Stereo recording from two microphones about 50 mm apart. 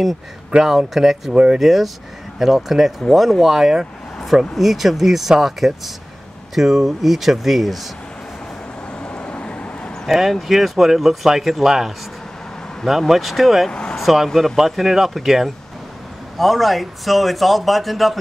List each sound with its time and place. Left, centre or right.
0.5 s speech: centre
1.3 s speech: centre
1.6 s speech: centre
9.0 s vehicle: left
10.0 s speech: centre
13.7 s speech: centre
13.9 s speech: centre